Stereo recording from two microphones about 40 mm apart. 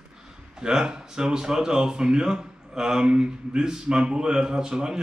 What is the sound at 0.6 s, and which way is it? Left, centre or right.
Speech, centre.